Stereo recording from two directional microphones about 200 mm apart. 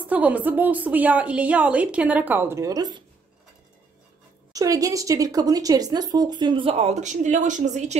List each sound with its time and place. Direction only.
0.0 s a woman's voice: 5° right (ahead or behind)
4.5 s speech: 15° right (ahead or behind); by 8.0 s 35° right (ahead or behind)